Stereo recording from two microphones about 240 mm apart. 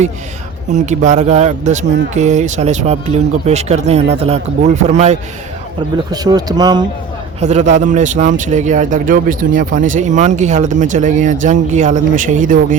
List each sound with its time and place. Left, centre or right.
0.7 s speech: right
6.1 s speech: centre
7.3 s a man's voice: right